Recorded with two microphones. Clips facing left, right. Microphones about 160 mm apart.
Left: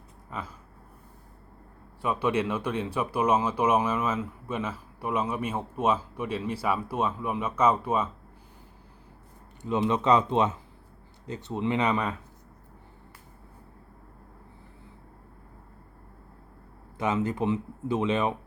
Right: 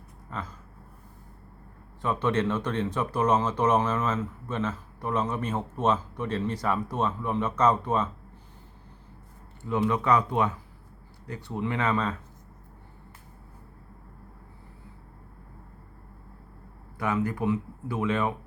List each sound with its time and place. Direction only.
0.3 s a sound: 10° left (ahead or behind)
2.0 s speech: 10° left (ahead or behind)
9.6 s speech: 20° left (ahead or behind)
17.0 s speech: 20° left (ahead or behind)